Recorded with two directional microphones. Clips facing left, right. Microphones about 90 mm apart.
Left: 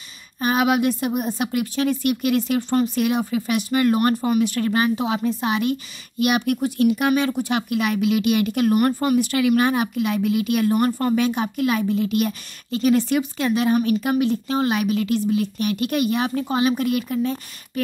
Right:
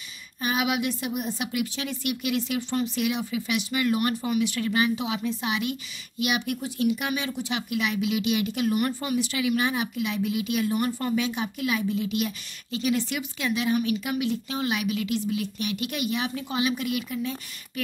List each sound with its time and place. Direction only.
0.4 s speech: 45° left (ahead or behind)